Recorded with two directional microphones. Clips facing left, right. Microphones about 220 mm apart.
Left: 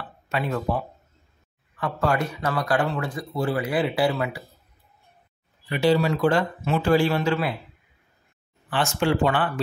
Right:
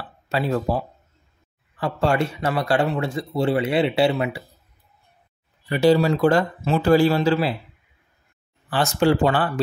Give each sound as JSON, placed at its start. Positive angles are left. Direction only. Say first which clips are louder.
{"t": 0.3, "sound": "speech", "louder": "right 3 dB", "side_deg": -30}
{"t": 5.7, "sound": "speech", "louder": "right 4 dB", "side_deg": -40}
{"t": 8.6, "sound": "speech", "louder": "right 4 dB", "side_deg": -40}